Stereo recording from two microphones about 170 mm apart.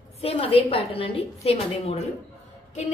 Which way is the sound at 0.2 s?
35° left (ahead or behind).